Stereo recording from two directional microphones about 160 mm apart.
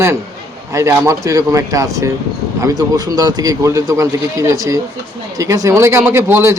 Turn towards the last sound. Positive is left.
turn(degrees=-15)  # may be behind; listen again after turning